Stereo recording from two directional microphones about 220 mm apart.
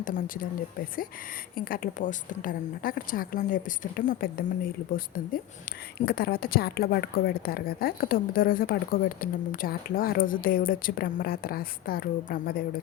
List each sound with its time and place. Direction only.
1.5 s a woman's voice: 40° left (ahead or behind)